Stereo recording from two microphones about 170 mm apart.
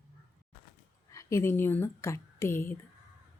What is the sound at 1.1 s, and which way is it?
A woman's voice, 20° left (ahead or behind).